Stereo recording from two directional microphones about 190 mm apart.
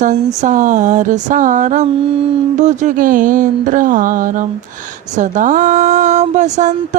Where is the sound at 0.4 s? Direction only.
40° right (ahead or behind).